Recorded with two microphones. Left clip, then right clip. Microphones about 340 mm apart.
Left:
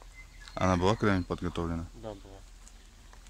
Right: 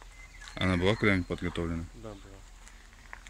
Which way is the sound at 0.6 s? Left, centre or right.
Centre.